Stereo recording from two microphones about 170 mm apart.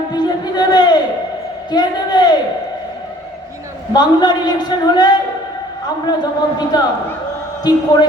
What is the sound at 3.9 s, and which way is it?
A man's voice, 25° left (ahead or behind).